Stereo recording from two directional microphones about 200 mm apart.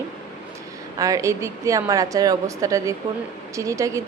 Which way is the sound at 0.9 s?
15° right (ahead or behind).